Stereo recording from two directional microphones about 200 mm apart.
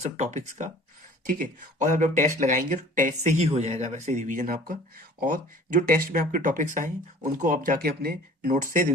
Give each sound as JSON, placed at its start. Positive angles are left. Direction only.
{"t": 0.0, "sound": "speech", "side_deg": -35}